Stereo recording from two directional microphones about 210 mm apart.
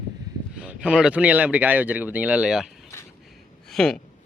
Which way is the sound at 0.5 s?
5° right (ahead or behind).